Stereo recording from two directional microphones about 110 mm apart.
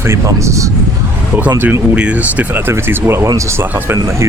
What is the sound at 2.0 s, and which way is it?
Speech, 15° right (ahead or behind).